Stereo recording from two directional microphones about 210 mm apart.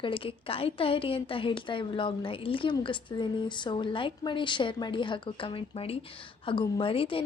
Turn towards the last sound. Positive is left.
turn(degrees=25)  # may be behind; listen again after turning